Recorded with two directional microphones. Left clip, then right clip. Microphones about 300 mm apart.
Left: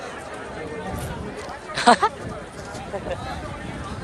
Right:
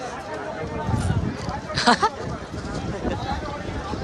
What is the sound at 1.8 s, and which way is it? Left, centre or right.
Speech, centre.